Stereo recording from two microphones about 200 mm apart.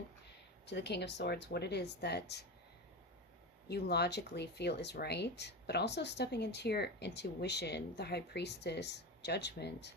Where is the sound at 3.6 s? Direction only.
55° left (ahead or behind).